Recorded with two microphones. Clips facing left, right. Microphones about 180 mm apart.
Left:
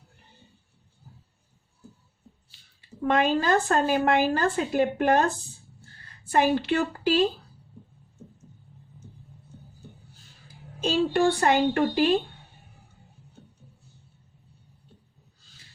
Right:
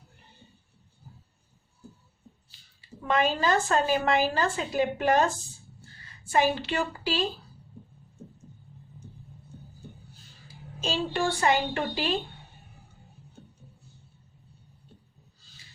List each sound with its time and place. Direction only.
3.0 s a woman's voice: 55° left (ahead or behind)
11.1 s speech: 55° left (ahead or behind)